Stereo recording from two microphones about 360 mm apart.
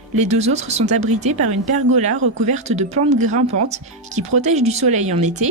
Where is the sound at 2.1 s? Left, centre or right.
Right.